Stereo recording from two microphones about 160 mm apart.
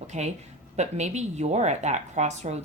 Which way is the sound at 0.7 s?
45° right (ahead or behind).